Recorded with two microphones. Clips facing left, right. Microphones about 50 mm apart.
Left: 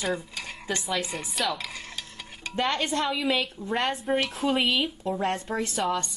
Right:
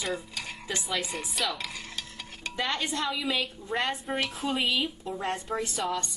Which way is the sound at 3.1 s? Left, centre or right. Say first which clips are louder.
Left 4 dB; left.